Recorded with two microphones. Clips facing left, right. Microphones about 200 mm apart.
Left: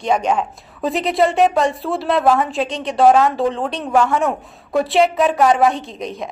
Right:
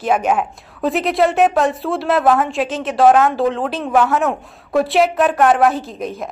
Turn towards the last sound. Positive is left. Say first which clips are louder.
# right 1 dB
turn(degrees=0)  # may be behind; listen again after turning